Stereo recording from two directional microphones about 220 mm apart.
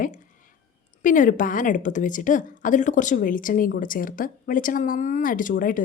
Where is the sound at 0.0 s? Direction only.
35° left (ahead or behind).